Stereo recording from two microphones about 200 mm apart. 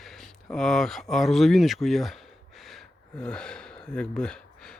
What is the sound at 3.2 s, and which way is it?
Speech, 5° left (ahead or behind).